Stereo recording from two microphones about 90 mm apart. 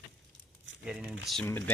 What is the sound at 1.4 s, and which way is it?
Speech, 25° left (ahead or behind).